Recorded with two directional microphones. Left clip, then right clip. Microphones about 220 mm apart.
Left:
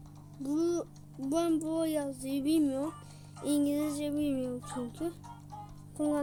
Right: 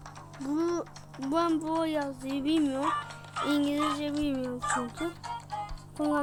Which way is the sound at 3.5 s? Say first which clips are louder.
Right 2 dB; 10° left (ahead or behind).